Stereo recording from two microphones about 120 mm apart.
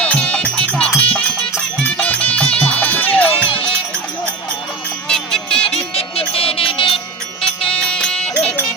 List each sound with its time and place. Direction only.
0.0 s music: 10° left (ahead or behind)
5.0 s a sound: 5° left (ahead or behind)
5.6 s music: 55° left (ahead or behind)
7.7 s music: 10° left (ahead or behind)